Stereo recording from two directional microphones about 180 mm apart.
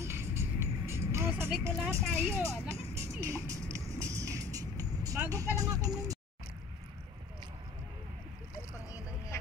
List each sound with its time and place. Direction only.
0.0 s music: 15° right (ahead or behind)
9.3 s vehicle: 15° left (ahead or behind)